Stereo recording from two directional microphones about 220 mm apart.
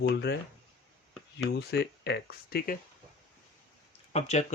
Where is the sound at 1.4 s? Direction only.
50° left (ahead or behind).